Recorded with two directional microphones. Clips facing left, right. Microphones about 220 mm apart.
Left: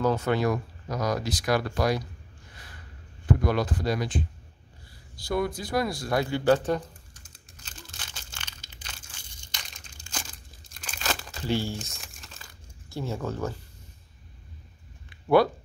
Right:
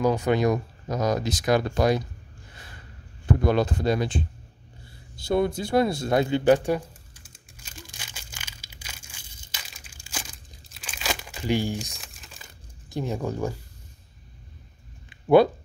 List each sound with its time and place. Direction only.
0.0 s speech: 15° right (ahead or behind)
3.3 s speech: 25° right (ahead or behind)
5.1 s a sound: 25° right (ahead or behind); by 9.9 s 5° right (ahead or behind)
10.0 s crumpling: 10° right (ahead or behind)
11.9 s crumpling: centre (ahead or behind)
12.9 s speech: 15° right (ahead or behind)
15.0 s a sound: 20° right (ahead or behind)